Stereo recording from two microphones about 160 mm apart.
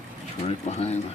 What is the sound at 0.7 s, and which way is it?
Pigeon, 40° left (ahead or behind).